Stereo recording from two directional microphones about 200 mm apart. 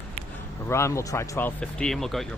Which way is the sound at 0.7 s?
15° left (ahead or behind).